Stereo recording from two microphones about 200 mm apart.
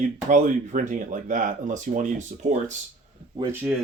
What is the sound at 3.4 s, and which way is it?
Speech, 10° right (ahead or behind).